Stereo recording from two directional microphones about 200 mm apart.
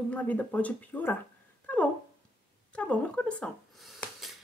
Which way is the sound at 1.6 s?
5° left (ahead or behind).